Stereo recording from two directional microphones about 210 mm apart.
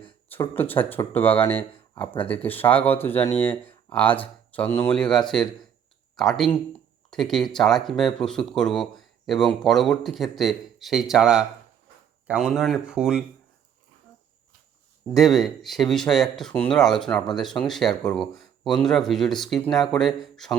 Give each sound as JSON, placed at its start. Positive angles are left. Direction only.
{"t": 0.3, "sound": "speech", "side_deg": 10}
{"t": 3.5, "sound": "a sound", "side_deg": 25}
{"t": 3.9, "sound": "speech", "side_deg": 5}
{"t": 15.1, "sound": "speech", "side_deg": 0}